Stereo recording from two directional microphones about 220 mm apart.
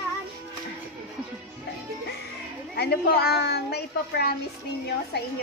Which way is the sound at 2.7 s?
45° left (ahead or behind).